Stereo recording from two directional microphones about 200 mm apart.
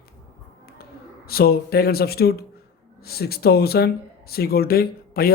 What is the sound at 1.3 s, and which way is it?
A man's voice, 50° left (ahead or behind).